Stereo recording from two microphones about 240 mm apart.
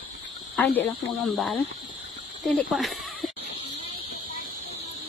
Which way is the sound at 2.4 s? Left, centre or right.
Centre.